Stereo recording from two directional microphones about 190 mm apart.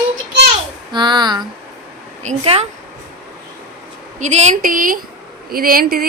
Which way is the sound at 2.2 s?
35° right (ahead or behind).